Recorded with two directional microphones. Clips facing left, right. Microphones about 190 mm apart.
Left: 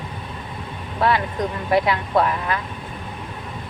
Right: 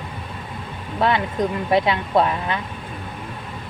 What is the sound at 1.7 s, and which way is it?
Speech, 25° right (ahead or behind).